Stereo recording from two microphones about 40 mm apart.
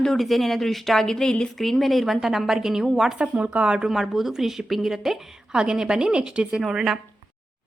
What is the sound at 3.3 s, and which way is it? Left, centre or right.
Speech, right.